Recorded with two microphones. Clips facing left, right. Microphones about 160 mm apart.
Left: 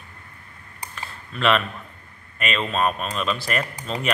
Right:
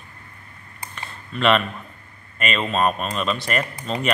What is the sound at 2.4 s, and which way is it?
Speech, centre (ahead or behind).